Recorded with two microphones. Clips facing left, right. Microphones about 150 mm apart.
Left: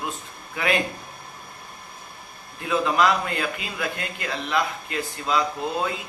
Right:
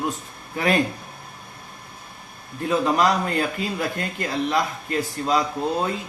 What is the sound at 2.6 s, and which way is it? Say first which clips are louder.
Speech: right 1 dB; 40° right (ahead or behind).